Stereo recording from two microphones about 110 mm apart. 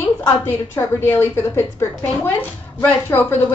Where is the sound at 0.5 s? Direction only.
20° left (ahead or behind).